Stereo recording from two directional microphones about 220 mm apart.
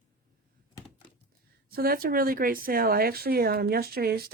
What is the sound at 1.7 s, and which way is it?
Speech, 40° right (ahead or behind).